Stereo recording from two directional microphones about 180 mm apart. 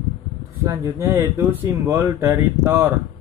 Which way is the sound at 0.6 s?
20° right (ahead or behind).